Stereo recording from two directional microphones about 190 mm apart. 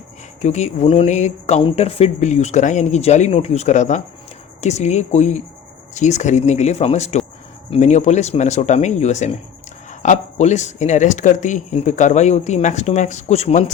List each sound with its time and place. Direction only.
0.4 s speech: 35° left (ahead or behind)